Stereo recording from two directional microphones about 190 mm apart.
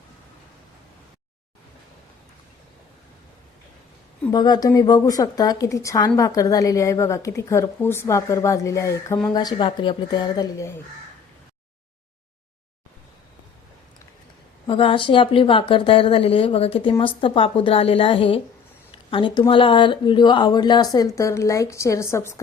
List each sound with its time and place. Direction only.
4.3 s speech: 20° left (ahead or behind)
14.7 s speech: 25° left (ahead or behind)